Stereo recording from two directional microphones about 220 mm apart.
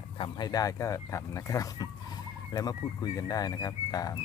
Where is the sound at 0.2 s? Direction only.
20° left (ahead or behind).